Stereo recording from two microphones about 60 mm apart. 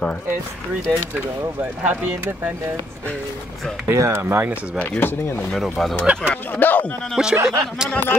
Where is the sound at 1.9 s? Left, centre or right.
Right.